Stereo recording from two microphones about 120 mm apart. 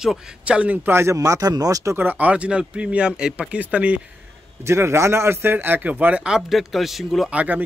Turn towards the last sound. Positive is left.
turn(degrees=-15)  # may be behind; listen again after turning